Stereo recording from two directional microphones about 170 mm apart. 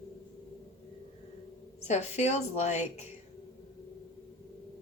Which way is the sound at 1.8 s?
40° left (ahead or behind).